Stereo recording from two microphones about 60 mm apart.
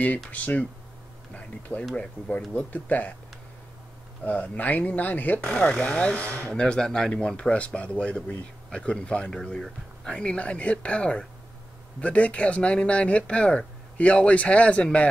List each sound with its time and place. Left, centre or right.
0.0 s speech: left
2.5 s speech: left
4.2 s speech: left
9.3 s speech: centre